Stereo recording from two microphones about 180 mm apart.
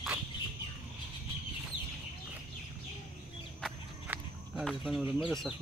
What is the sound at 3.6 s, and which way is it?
Walk, centre (ahead or behind).